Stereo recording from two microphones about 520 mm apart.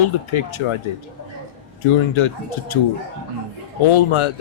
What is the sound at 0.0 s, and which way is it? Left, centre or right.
Speech, left.